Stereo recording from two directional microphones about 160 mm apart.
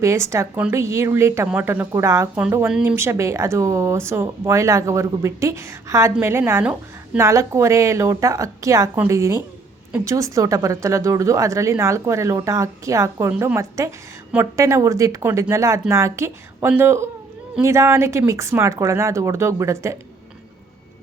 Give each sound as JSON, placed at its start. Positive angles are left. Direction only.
{"t": 0.0, "sound": "speech", "side_deg": -20}